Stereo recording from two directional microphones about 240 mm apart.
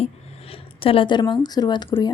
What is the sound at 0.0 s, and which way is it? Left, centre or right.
Speech, left.